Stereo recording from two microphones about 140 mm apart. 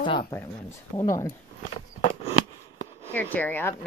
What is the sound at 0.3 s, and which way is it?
Speech, 20° left (ahead or behind).